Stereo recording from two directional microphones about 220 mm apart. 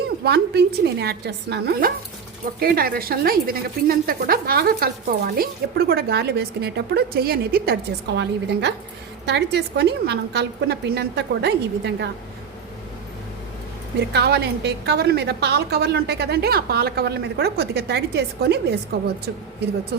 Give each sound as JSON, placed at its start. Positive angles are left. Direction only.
{"t": 0.3, "sound": "a woman's voice", "side_deg": -45}
{"t": 14.1, "sound": "a woman's voice", "side_deg": -50}